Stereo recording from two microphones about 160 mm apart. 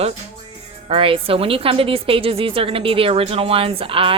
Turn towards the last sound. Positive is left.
turn(degrees=-35)  # may be behind; listen again after turning